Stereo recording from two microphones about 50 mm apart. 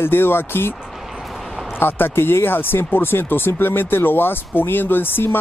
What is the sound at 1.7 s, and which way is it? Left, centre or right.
Speech, left.